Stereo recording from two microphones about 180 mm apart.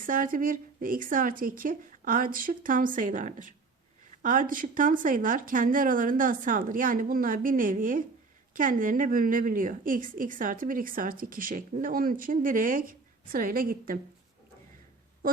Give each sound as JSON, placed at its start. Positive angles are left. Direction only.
{"t": 0.0, "sound": "a woman's voice", "side_deg": -50}